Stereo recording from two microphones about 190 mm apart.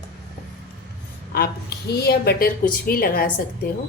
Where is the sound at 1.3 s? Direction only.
55° left (ahead or behind).